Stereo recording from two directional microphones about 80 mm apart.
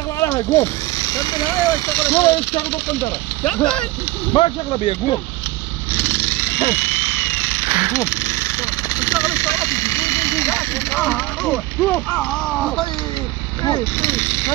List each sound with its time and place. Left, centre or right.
0.2 s speech: left
1.9 s speech: left
3.4 s speech: centre
4.3 s speech: left
5.9 s jackhammer: left
7.9 s vehicle: left
10.9 s speech: left
11.4 s speech: centre
14.0 s speech: left